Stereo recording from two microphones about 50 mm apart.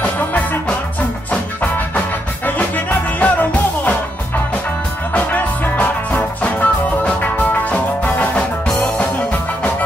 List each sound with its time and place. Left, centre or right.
0.0 s music: left
2.4 s music: left
5.1 s music: left